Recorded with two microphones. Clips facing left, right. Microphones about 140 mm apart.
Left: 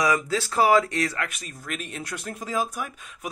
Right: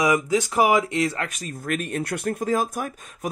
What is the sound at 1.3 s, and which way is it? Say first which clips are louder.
Speech: right 7 dB; 45° right (ahead or behind).